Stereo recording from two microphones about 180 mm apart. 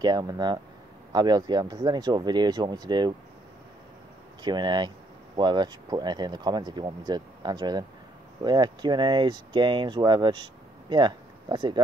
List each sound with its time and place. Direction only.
0.0 s speech: 20° right (ahead or behind)
4.4 s speech: 25° right (ahead or behind)